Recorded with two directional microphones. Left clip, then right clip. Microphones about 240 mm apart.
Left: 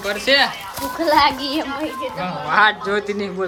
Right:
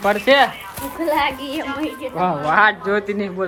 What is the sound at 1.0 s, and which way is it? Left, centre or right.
Speech, left.